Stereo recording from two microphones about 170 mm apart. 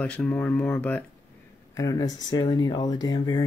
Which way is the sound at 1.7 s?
20° left (ahead or behind).